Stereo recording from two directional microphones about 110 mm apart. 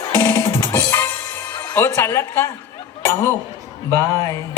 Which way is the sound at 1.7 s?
20° left (ahead or behind).